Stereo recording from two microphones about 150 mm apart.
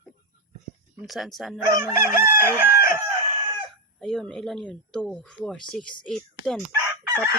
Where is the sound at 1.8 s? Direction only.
20° right (ahead or behind).